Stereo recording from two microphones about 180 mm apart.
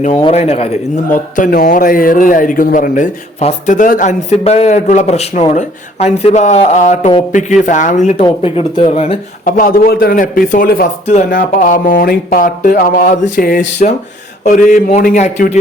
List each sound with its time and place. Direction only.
0.2 s a man's voice: 35° left (ahead or behind)
8.2 s speech: 30° left (ahead or behind)
9.4 s a man's voice: 50° left (ahead or behind)
11.0 s a man's voice: 40° left (ahead or behind)